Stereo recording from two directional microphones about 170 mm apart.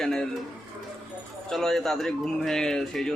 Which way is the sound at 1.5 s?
Centre (ahead or behind).